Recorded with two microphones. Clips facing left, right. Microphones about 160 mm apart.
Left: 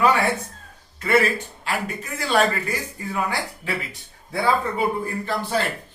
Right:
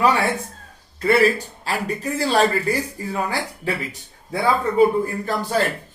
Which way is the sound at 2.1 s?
35° right (ahead or behind).